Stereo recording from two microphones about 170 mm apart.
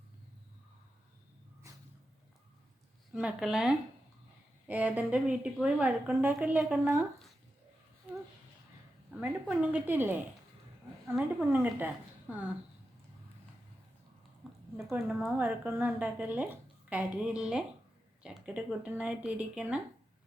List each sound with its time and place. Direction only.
1.7 s a sound: 20° right (ahead or behind)
3.1 s a woman's voice: 5° right (ahead or behind)
9.2 s a woman's voice: 10° right (ahead or behind)
11.2 s a woman's voice: 10° right (ahead or behind)
14.4 s a sound: centre (ahead or behind)
15.2 s a woman's voice: 10° right (ahead or behind)